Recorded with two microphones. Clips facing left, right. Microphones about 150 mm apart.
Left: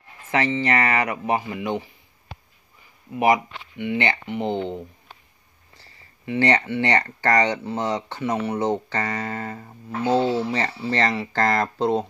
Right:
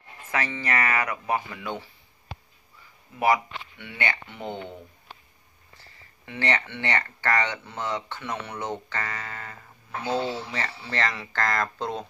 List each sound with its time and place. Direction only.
0.3 s speech: 25° left (ahead or behind)
3.8 s speech: 25° left (ahead or behind)
6.2 s speech: 30° left (ahead or behind)